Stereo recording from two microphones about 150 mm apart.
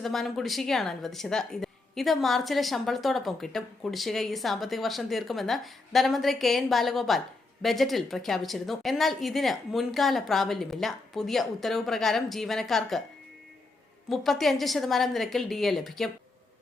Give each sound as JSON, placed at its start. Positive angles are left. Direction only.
{"t": 0.0, "sound": "a woman's voice", "side_deg": 0}
{"t": 14.1, "sound": "a woman's voice", "side_deg": 0}